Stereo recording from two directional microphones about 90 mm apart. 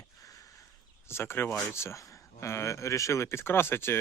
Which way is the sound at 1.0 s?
25° left (ahead or behind).